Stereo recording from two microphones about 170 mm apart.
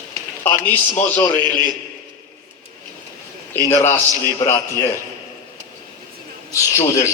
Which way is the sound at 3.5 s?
15° left (ahead or behind).